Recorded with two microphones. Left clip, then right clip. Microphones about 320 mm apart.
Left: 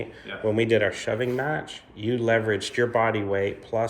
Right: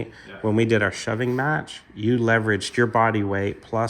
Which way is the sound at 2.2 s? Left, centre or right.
Right.